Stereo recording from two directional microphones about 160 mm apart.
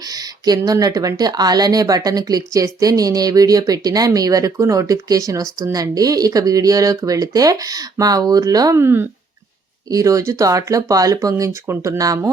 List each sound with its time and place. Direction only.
0.1 s a woman's voice: 25° right (ahead or behind)